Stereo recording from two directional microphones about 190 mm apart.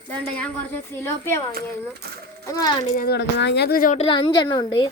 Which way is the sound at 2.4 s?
20° left (ahead or behind).